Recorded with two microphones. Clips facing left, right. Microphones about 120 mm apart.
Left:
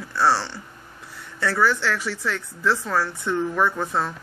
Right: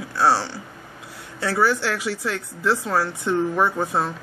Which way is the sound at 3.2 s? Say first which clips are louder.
Right 3 dB; 15° right (ahead or behind).